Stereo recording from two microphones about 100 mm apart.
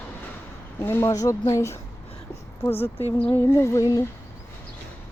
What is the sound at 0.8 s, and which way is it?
Speech, 25° left (ahead or behind).